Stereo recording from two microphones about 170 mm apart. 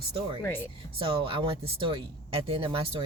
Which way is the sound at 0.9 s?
30° right (ahead or behind).